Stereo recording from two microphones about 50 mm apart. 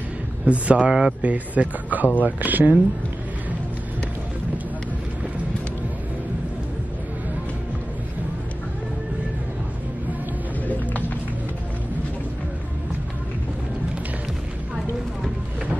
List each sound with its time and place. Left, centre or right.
0.5 s speech: right